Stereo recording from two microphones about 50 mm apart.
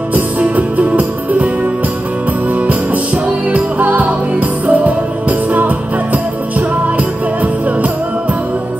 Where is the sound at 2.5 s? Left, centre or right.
Right.